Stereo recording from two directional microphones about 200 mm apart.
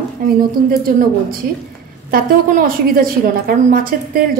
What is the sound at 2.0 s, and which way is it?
A woman's voice, 45° right (ahead or behind).